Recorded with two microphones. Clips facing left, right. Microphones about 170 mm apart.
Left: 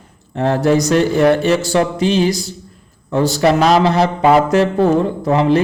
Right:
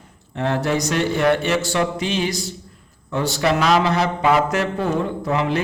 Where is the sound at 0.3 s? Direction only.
40° left (ahead or behind).